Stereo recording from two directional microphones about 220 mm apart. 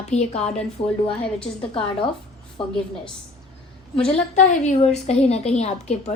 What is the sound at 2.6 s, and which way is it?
Speech, 25° left (ahead or behind).